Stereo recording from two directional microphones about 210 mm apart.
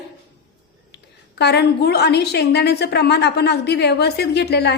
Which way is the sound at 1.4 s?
50° left (ahead or behind).